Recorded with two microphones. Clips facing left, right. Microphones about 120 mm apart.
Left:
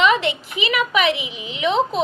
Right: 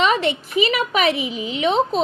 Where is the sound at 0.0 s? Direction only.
40° right (ahead or behind).